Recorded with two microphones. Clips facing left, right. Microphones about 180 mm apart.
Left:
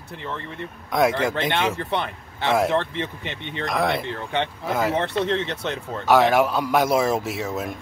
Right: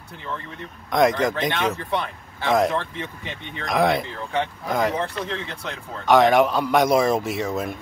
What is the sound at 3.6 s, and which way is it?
A man's voice, centre (ahead or behind).